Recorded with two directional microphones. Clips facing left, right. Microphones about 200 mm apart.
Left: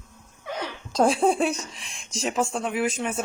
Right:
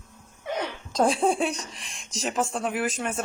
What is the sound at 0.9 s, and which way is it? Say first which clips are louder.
Speech: left 2 dB; centre (ahead or behind).